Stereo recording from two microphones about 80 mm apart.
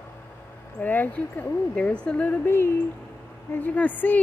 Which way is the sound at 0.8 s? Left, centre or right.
Left.